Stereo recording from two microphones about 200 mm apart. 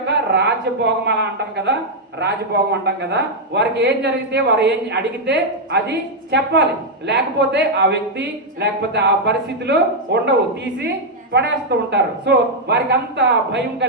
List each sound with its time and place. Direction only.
0.0 s speech: 60° right (ahead or behind)
2.8 s speech: 55° right (ahead or behind)